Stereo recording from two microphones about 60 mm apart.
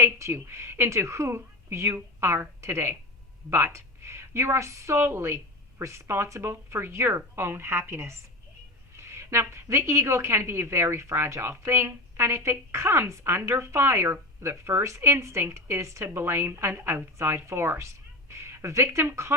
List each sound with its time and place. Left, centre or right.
0.0 s a woman's voice: right
9.1 s a woman's voice: right
18.3 s speech: right